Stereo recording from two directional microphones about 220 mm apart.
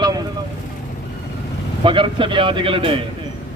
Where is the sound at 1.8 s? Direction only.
20° right (ahead or behind).